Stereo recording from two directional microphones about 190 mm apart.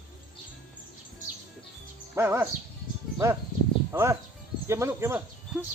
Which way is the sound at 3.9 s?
15° right (ahead or behind).